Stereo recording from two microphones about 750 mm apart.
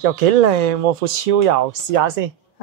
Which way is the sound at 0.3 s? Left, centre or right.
Right.